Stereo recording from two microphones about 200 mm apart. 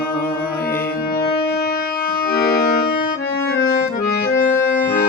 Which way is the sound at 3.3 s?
50° left (ahead or behind).